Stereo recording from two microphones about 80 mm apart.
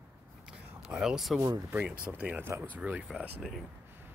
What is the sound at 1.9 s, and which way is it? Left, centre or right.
Speech, centre.